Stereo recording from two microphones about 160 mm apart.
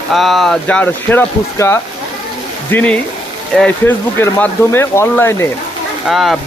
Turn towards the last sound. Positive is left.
turn(degrees=0)  # may be behind; listen again after turning